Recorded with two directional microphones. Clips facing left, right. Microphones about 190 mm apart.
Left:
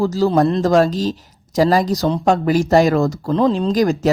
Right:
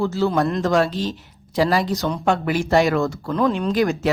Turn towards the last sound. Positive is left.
turn(degrees=40)  # may be behind; listen again after turning